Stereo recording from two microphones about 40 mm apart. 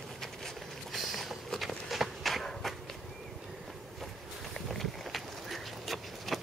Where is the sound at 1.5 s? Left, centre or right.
Centre.